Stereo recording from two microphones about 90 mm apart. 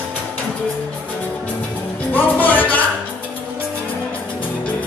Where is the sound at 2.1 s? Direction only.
20° left (ahead or behind).